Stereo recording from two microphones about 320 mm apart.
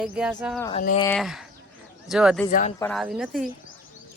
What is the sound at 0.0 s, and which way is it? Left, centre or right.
Speech, centre.